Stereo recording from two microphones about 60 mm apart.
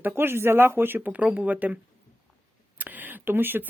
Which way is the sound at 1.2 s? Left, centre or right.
Right.